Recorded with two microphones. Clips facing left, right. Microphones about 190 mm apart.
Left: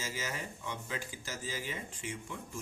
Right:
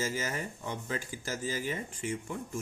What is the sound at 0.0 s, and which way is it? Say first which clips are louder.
Speech: right 6 dB; 50° right (ahead or behind).